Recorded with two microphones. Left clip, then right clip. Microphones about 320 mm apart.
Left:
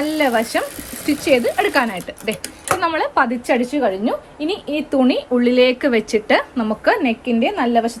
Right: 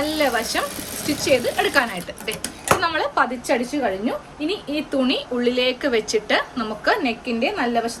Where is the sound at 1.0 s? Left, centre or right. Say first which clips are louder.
Left 4 dB; centre.